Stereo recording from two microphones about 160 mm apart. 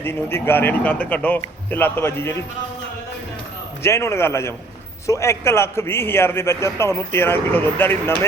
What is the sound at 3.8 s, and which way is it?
A man's voice, 15° left (ahead or behind).